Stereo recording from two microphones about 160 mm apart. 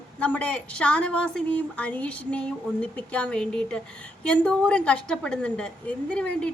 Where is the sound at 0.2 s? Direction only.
10° left (ahead or behind).